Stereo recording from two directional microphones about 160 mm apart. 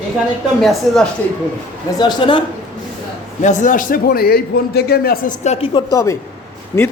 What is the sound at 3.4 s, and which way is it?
A man's voice, 50° left (ahead or behind).